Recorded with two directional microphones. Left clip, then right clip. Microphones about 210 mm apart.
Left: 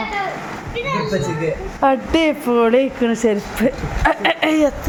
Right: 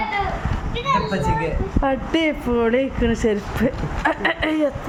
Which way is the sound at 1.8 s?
5° left (ahead or behind).